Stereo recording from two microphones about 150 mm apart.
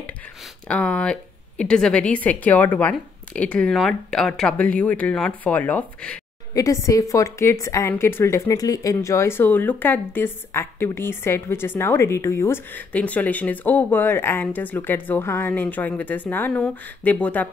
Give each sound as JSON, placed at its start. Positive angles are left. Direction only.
{"t": 0.7, "sound": "speech", "side_deg": 5}
{"t": 6.5, "sound": "a woman's voice", "side_deg": 20}